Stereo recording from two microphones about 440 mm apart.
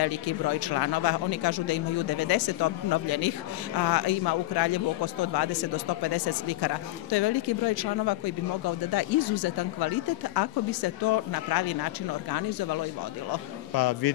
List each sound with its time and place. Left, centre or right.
0.0 s a man's voice: left